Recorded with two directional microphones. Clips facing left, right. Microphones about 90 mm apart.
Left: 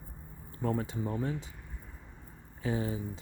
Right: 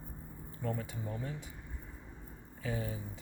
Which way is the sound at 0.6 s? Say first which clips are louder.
Left 6 dB; 40° left (ahead or behind).